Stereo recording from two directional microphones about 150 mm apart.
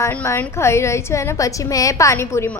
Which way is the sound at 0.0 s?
15° left (ahead or behind).